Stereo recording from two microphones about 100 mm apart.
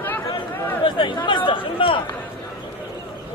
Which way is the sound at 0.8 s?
55° left (ahead or behind).